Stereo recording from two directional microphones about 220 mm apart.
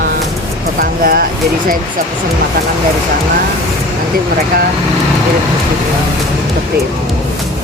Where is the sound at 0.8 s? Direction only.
40° right (ahead or behind).